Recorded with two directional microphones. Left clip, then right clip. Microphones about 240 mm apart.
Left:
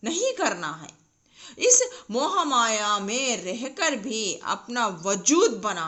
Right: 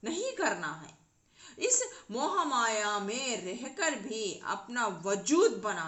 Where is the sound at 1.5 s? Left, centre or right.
Left.